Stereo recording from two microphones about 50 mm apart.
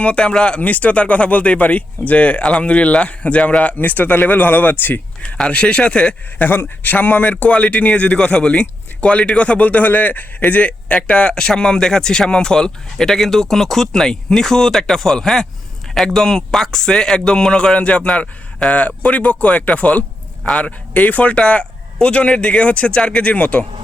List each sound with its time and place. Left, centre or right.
0.0 s speech: left
0.6 s speech: left
3.8 s speech: left
5.2 s speech: left
6.4 s a man's voice: left